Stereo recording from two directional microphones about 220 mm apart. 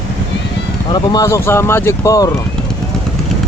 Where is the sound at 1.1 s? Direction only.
15° left (ahead or behind).